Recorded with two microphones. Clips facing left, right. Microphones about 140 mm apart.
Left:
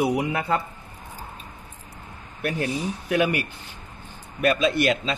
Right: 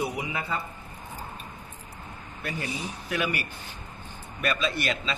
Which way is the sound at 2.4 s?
60° left (ahead or behind).